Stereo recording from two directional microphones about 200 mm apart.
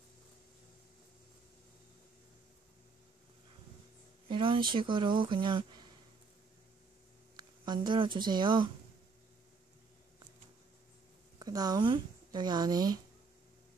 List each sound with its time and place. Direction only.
4.3 s a sound: 25° right (ahead or behind)
4.7 s speech: 25° right (ahead or behind)
7.3 s speech: 20° right (ahead or behind)
11.3 s speech: 20° right (ahead or behind)